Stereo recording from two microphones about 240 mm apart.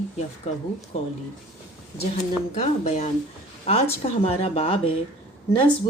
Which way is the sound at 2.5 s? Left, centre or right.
Left.